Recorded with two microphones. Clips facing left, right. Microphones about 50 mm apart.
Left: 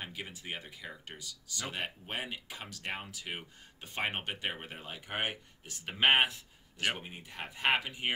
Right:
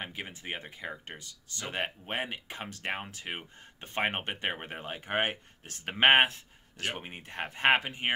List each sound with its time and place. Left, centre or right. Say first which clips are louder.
0.0 s speech: right 3 dB; right